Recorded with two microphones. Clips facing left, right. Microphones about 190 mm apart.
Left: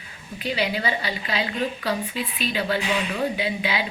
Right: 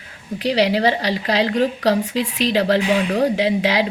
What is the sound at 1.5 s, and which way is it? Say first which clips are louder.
Speech: right 8 dB; 40° right (ahead or behind).